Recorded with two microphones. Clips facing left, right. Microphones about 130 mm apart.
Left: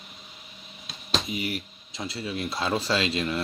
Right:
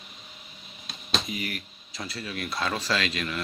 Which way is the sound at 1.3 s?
25° left (ahead or behind).